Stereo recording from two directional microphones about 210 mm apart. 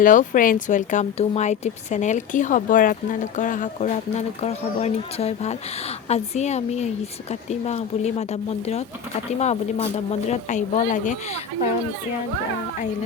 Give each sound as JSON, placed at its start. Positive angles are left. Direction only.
{"t": 0.0, "sound": "speech", "side_deg": 40}